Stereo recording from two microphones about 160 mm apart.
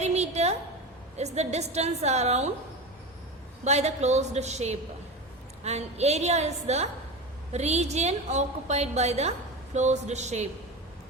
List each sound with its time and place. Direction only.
0.0 s a sound: 45° right (ahead or behind)
1.1 s a woman's voice: 45° right (ahead or behind)
3.6 s a woman's voice: 45° right (ahead or behind)